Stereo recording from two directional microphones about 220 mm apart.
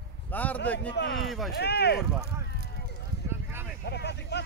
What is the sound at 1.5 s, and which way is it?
Speech, 50° left (ahead or behind).